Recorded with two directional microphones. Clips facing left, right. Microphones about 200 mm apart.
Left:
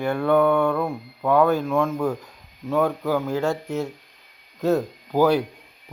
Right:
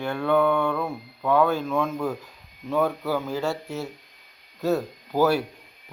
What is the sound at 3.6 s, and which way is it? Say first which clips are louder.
Speech: left 5 dB; 15° left (ahead or behind).